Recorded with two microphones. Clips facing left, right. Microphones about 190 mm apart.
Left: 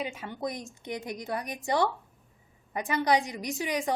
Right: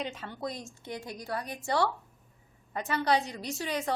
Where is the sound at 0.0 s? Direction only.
10° left (ahead or behind).